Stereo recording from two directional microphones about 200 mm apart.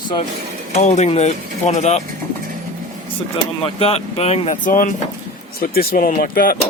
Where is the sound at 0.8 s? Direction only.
35° left (ahead or behind).